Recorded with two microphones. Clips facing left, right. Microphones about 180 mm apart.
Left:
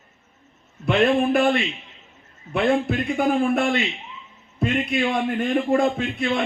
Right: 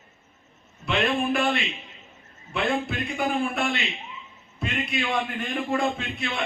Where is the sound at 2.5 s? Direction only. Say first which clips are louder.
Left 6 dB; 45° left (ahead or behind).